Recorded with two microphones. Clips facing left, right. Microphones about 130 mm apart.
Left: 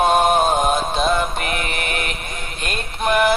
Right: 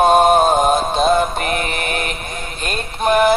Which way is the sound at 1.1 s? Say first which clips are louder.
Right 4 dB; 40° right (ahead or behind).